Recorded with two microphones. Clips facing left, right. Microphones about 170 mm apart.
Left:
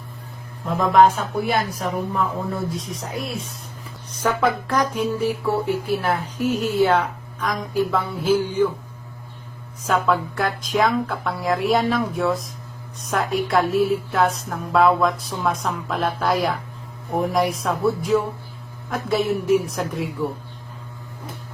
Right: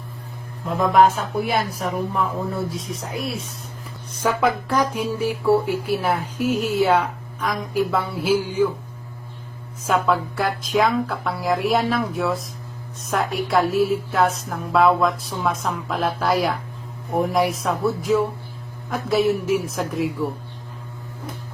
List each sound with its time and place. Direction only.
0.7 s music: centre (ahead or behind)
4.2 s speech: 10° right (ahead or behind)
9.8 s music: 5° right (ahead or behind)